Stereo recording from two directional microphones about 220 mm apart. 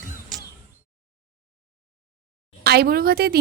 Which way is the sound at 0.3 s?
Centre (ahead or behind).